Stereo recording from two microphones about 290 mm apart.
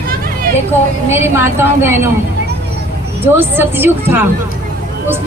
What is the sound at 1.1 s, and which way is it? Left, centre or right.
A man's voice, centre.